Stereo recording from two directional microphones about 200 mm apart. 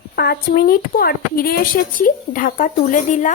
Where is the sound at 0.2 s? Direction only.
50° left (ahead or behind).